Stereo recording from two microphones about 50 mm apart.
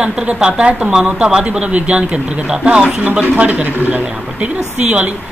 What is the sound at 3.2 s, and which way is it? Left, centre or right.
A man's voice, right.